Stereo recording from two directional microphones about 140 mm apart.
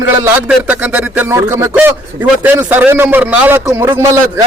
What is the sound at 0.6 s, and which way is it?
A man's voice, 10° right (ahead or behind).